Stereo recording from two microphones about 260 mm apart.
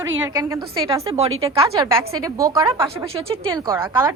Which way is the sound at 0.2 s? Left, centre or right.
Centre.